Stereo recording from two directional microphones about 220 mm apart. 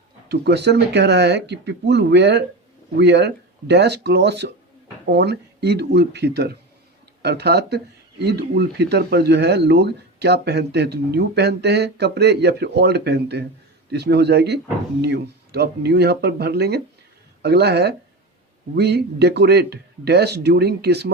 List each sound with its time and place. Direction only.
0.3 s speech: 50° right (ahead or behind)